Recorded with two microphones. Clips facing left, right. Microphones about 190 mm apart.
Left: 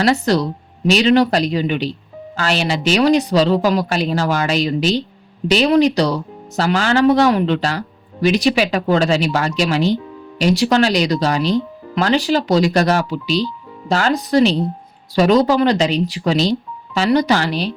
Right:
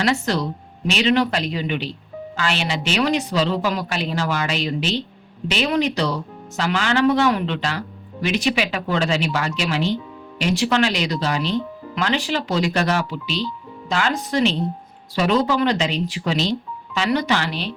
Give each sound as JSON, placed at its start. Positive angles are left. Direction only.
{"t": 0.0, "sound": "speech", "side_deg": 35}